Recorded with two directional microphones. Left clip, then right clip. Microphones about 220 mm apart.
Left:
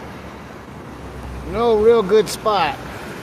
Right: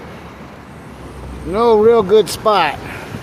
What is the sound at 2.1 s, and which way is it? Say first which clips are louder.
Speech: right 3 dB; 15° right (ahead or behind).